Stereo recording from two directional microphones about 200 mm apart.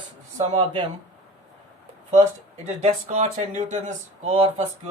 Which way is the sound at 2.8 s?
35° right (ahead or behind).